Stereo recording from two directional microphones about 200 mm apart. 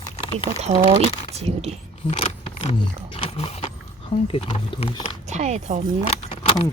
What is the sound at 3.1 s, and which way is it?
Speech, 30° left (ahead or behind).